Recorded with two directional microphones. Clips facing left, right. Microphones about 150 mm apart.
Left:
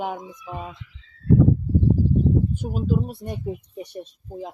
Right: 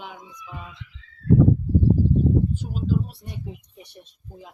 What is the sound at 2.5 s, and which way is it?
Speech, 55° left (ahead or behind).